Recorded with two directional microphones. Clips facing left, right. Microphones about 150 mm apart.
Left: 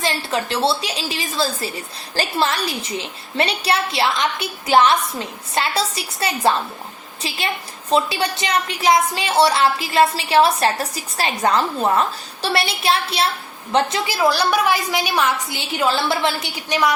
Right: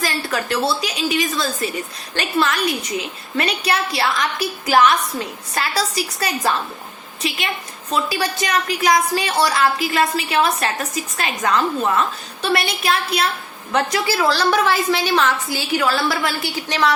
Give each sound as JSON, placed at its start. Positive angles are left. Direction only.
{"t": 0.0, "sound": "a woman's voice", "side_deg": 25}
{"t": 14.2, "sound": "a woman's voice", "side_deg": 15}